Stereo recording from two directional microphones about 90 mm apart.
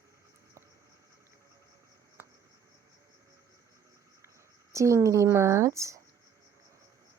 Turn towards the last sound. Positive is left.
turn(degrees=-35)  # may be behind; listen again after turning